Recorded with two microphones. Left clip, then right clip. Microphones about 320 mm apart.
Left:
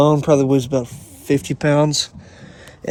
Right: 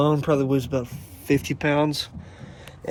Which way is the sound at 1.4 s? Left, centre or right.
Left.